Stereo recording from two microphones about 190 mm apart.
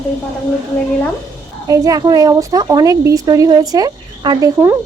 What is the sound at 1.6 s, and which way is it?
A woman's voice, 20° right (ahead or behind).